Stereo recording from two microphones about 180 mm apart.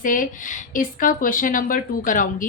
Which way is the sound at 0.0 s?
45° left (ahead or behind).